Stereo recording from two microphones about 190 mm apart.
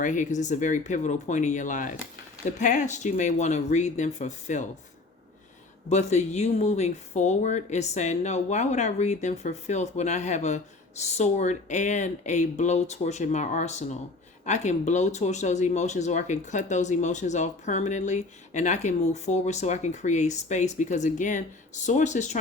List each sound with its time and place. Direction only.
0.0 s speech: 40° left (ahead or behind)
5.9 s speech: 35° left (ahead or behind)